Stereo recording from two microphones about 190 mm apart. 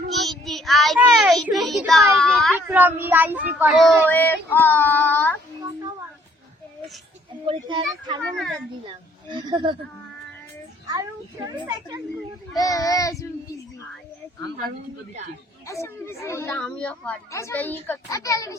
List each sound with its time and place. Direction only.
0.1 s child singing: centre (ahead or behind)
2.1 s a sound: centre (ahead or behind)
2.6 s speech: 10° right (ahead or behind)
3.8 s a child's voice: 5° left (ahead or behind)
7.4 s a child's voice: 25° right (ahead or behind)
10.8 s child singing: 20° right (ahead or behind)
11.7 s a child's voice: 20° right (ahead or behind)
12.5 s a child's voice: 20° left (ahead or behind)
15.6 s a child's voice: 15° left (ahead or behind)